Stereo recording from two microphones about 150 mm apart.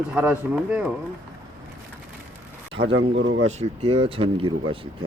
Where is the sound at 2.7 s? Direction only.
35° right (ahead or behind).